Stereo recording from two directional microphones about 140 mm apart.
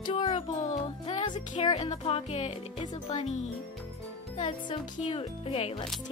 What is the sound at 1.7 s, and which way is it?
Speech, 45° left (ahead or behind).